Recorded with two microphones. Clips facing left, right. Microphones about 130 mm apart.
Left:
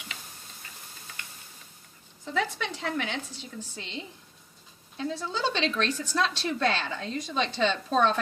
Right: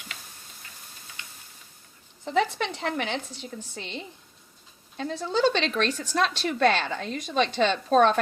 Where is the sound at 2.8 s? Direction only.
60° right (ahead or behind).